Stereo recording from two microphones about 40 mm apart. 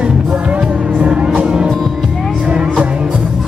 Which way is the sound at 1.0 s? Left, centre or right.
Right.